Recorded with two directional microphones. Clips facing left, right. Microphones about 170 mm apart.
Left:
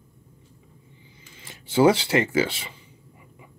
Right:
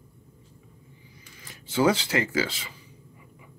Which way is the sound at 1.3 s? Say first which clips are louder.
Left 5 dB; 25° left (ahead or behind).